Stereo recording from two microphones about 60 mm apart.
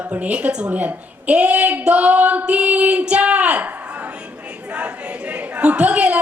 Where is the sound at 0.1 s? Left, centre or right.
Right.